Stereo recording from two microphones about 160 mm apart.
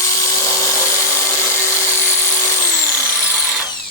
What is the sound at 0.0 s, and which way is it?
Dental drill, 20° left (ahead or behind).